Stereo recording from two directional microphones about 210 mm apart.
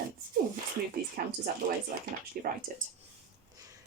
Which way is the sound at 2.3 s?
45° right (ahead or behind).